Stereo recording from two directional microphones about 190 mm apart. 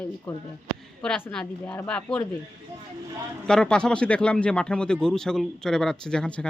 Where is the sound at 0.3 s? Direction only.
5° left (ahead or behind).